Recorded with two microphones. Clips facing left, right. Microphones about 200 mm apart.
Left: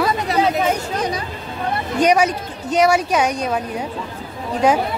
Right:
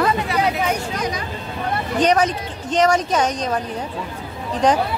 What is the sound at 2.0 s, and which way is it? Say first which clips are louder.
A woman's voice: left 2 dB; 10° left (ahead or behind).